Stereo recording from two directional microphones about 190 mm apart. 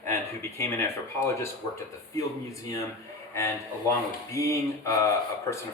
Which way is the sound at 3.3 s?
15° left (ahead or behind).